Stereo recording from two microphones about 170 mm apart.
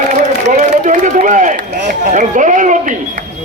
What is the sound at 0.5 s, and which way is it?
A man's voice, 50° right (ahead or behind).